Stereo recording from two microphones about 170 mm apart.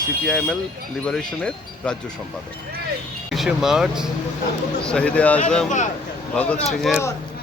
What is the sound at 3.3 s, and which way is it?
Speech, centre (ahead or behind).